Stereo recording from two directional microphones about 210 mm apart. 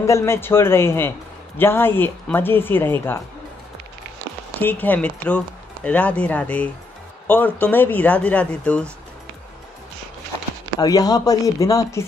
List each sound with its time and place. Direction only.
0.0 s speech: 15° left (ahead or behind)
4.6 s speech: 10° left (ahead or behind)
10.8 s speech: 15° left (ahead or behind)